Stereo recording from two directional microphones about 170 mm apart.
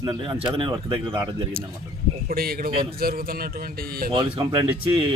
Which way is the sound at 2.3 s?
60° right (ahead or behind).